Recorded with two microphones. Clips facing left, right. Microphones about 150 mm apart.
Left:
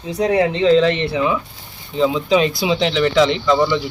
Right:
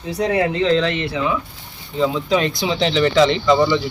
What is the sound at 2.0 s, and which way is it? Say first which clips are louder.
Speech: left 3 dB; 10° left (ahead or behind).